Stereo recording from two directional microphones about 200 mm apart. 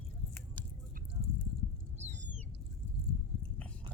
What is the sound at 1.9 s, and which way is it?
Owl, 35° right (ahead or behind).